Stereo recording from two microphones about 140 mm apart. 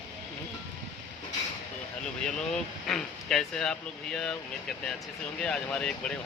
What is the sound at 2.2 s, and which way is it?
Speech, 5° left (ahead or behind).